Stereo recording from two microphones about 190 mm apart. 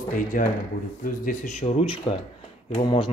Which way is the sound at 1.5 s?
35° left (ahead or behind).